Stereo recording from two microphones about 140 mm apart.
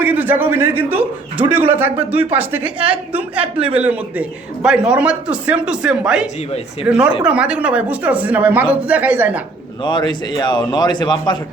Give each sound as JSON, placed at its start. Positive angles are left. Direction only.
{"t": 0.0, "sound": "a man's voice", "side_deg": -15}
{"t": 9.8, "sound": "a man's voice", "side_deg": 35}